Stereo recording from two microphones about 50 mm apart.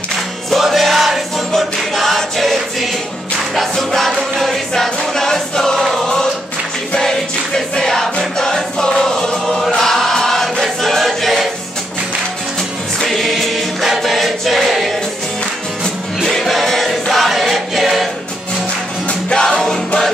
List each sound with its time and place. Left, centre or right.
0.5 s music: centre
7.1 s music: centre
13.0 s choir: centre
15.8 s music: centre
19.0 s music: centre